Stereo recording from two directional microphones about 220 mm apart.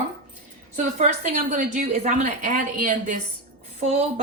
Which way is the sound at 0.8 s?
35° right (ahead or behind).